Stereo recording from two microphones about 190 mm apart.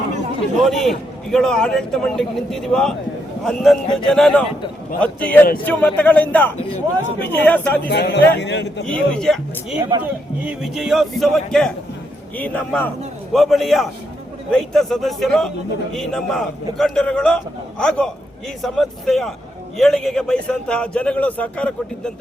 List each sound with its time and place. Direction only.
0.6 s a man's voice: centre (ahead or behind)
7.9 s a man's voice: 60° left (ahead or behind)
8.9 s a man's voice: 5° left (ahead or behind)